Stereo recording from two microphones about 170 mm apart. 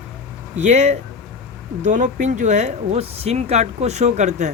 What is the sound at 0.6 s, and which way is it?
Speech, 45° right (ahead or behind).